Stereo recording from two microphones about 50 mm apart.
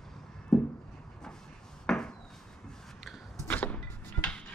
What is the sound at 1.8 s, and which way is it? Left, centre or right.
Wood, centre.